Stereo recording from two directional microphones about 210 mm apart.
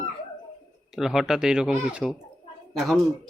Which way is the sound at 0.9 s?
Centre (ahead or behind).